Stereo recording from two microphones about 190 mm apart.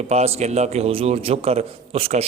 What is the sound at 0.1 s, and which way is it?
A man's voice, 35° right (ahead or behind).